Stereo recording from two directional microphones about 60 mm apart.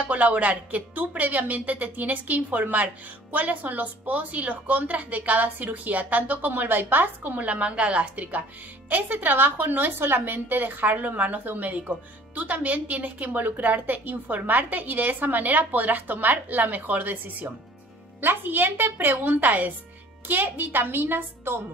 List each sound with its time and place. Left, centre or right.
0.0 s a woman's voice: right